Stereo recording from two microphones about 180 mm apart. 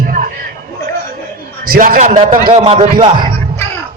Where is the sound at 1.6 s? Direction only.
55° right (ahead or behind).